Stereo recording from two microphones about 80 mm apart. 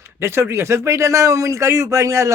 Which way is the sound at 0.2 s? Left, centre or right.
Right.